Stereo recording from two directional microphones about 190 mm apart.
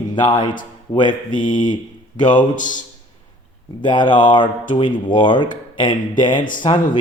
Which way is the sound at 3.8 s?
25° left (ahead or behind).